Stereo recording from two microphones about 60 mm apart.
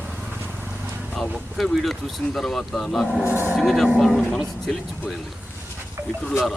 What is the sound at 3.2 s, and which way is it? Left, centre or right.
Speech, right.